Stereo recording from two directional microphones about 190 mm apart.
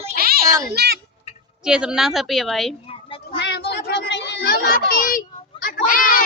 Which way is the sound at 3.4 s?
60° left (ahead or behind).